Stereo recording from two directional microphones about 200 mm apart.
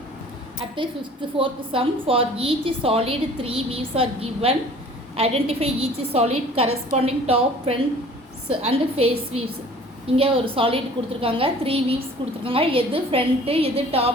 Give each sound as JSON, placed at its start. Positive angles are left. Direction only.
{"t": 1.4, "sound": "a woman's voice", "side_deg": -25}